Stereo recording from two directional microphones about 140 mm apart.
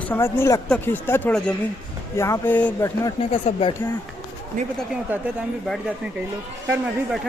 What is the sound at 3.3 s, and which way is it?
Speech, 50° left (ahead or behind).